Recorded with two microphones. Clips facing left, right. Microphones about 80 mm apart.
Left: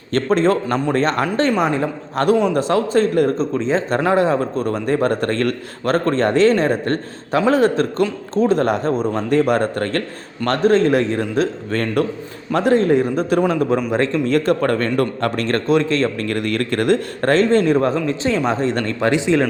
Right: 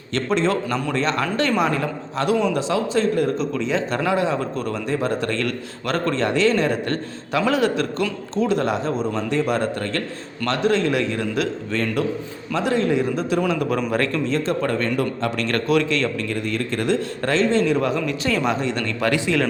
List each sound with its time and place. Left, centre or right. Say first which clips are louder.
0.1 s speech: left 5 dB; left
1.2 s speech: left 3 dB; left
2.2 s speech: left 4 dB; left
13.5 s speech: left 4 dB; left
14.3 s speech: left 5 dB; left
15.4 s speech: left 3 dB; left
16.3 s speech: left 4 dB; left
18.9 s speech: left 4 dB; left